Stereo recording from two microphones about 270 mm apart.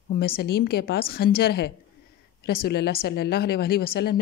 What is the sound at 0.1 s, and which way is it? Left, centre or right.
A woman's voice, left.